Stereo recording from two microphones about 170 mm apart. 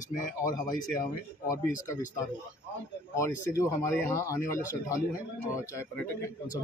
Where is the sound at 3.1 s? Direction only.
15° left (ahead or behind).